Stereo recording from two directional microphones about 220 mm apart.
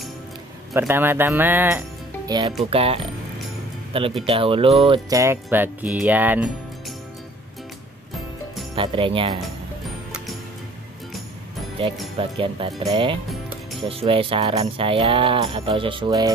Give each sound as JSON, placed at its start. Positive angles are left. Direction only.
{"t": 0.7, "sound": "music", "side_deg": -10}
{"t": 3.9, "sound": "speech", "side_deg": -25}
{"t": 4.3, "sound": "music", "side_deg": -25}
{"t": 8.7, "sound": "music", "side_deg": -25}
{"t": 11.8, "sound": "music", "side_deg": -25}
{"t": 13.3, "sound": "music", "side_deg": 0}
{"t": 13.8, "sound": "music", "side_deg": -25}